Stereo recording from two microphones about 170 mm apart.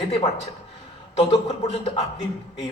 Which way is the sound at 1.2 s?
35° left (ahead or behind).